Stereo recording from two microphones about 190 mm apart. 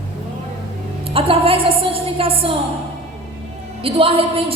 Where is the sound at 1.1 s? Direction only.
30° right (ahead or behind).